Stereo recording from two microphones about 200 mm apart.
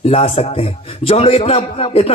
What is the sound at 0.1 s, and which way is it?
A man's voice, 30° left (ahead or behind).